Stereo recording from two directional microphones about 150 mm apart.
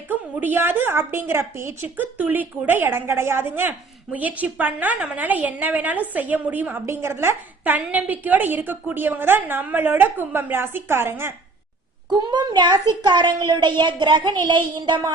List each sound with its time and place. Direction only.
0.1 s a woman's voice: 10° right (ahead or behind)
12.3 s a child's voice: 30° right (ahead or behind)